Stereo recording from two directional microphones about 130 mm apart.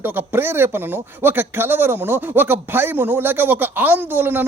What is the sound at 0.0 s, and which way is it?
Speech, 15° right (ahead or behind).